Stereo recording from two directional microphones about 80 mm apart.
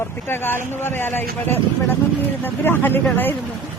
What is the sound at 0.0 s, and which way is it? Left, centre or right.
Speech, left.